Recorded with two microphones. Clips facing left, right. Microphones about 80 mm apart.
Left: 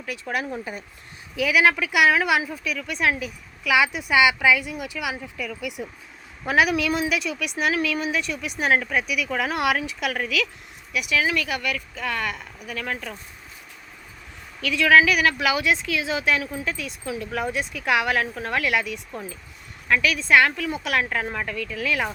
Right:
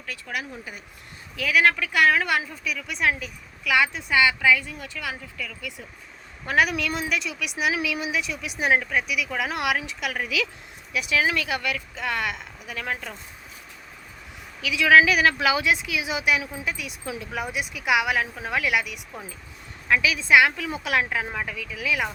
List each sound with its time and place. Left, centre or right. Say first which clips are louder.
0.1 s speech: left 5 dB; centre
0.7 s speech: left 6 dB; left
1.4 s speech: left 2 dB; centre
6.4 s a woman's voice: left 2 dB; centre
10.2 s speech: left 2 dB; centre
14.6 s speech: even; centre
21.1 s a woman's voice: left 1 dB; centre